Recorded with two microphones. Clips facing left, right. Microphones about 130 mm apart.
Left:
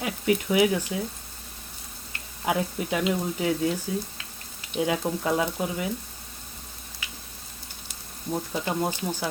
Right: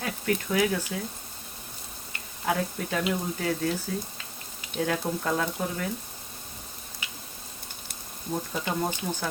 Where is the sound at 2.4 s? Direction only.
15° left (ahead or behind).